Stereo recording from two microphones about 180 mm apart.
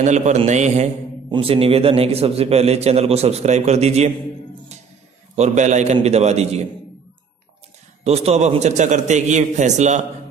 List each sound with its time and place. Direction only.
0.0 s a man's voice: 40° right (ahead or behind)
5.3 s a man's voice: 40° right (ahead or behind)
8.0 s a man's voice: 35° right (ahead or behind)